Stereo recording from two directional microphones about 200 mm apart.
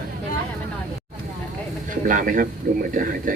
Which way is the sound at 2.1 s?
40° right (ahead or behind).